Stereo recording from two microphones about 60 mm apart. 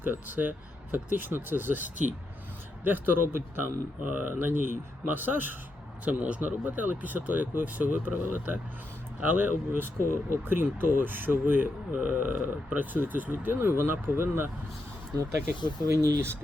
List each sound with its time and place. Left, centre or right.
0.0 s speech: right
6.1 s speech: right
16.0 s speech: right